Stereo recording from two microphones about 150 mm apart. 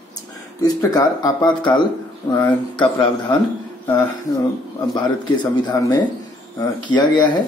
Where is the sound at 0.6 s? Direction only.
25° left (ahead or behind).